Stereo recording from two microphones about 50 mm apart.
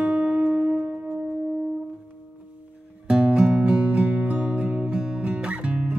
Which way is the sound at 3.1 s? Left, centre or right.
Centre.